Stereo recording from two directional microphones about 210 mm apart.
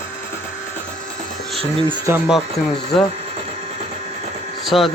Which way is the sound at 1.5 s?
25° right (ahead or behind).